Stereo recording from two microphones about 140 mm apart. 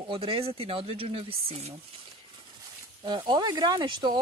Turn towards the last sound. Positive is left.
turn(degrees=-35)  # may be behind; listen again after turning